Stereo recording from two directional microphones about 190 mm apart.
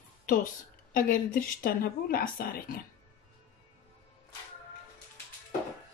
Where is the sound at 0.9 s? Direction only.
45° left (ahead or behind).